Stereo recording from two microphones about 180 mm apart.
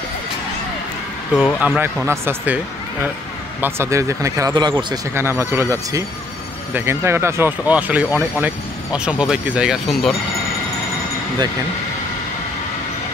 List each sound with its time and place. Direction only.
1.3 s speech: centre (ahead or behind)
1.8 s speech: 15° right (ahead or behind)